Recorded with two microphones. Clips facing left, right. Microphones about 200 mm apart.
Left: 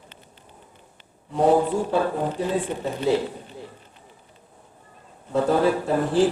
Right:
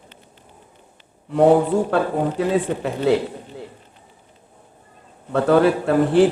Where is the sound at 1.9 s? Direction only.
75° right (ahead or behind).